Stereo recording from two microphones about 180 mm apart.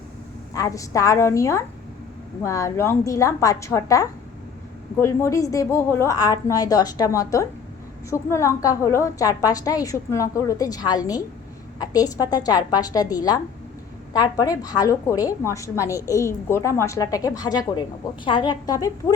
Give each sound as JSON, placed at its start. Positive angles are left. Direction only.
{"t": 0.5, "sound": "a woman's voice", "side_deg": 20}